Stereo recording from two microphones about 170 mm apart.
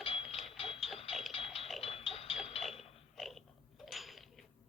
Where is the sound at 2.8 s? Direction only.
Centre (ahead or behind).